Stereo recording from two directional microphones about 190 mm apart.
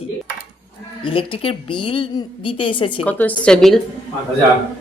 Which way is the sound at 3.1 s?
10° left (ahead or behind).